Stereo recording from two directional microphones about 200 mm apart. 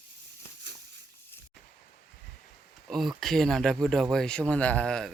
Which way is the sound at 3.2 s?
Centre (ahead or behind).